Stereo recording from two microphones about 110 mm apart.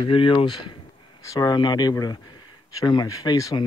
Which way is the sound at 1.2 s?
35° left (ahead or behind).